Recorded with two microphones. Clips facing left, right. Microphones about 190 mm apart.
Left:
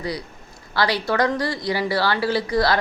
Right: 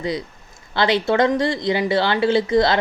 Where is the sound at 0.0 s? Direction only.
20° right (ahead or behind).